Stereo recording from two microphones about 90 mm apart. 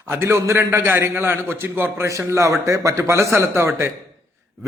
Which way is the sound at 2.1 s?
35° right (ahead or behind).